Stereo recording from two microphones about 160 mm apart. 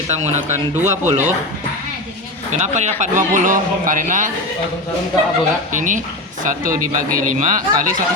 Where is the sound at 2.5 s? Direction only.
45° right (ahead or behind).